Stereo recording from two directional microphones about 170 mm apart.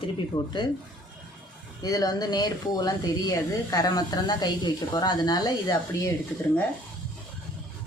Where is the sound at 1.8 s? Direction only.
20° left (ahead or behind).